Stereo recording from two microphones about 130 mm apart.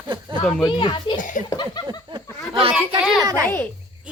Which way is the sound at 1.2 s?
80° left.